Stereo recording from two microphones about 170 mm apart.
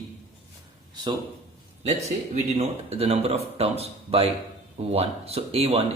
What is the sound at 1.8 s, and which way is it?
Speech, 40° right (ahead or behind).